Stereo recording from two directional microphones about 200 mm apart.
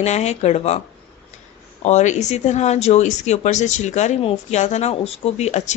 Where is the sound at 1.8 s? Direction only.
35° left (ahead or behind).